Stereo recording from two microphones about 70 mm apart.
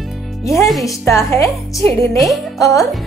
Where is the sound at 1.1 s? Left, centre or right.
Left.